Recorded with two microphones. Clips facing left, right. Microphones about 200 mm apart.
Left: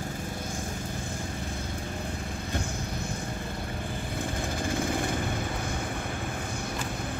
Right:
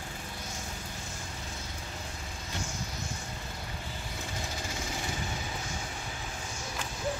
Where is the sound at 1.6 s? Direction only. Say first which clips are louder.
Left 8 dB; 55° left (ahead or behind).